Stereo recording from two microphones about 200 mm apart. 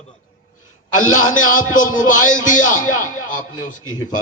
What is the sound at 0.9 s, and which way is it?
A man's voice, 40° left (ahead or behind).